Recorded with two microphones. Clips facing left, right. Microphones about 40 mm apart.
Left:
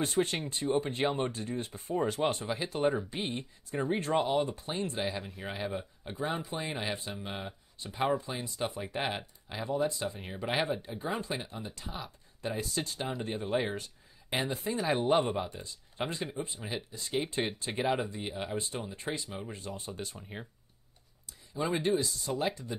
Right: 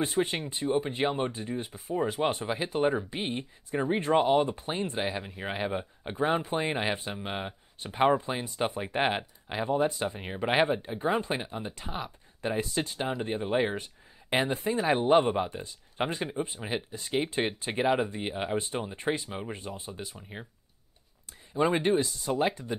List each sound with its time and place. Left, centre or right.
0.0 s speech: centre
2.1 s speech: right
5.0 s speech: centre
5.4 s speech: right
14.8 s speech: centre
15.3 s speech: right
17.8 s speech: centre
18.1 s speech: right
19.7 s speech: centre
21.8 s speech: right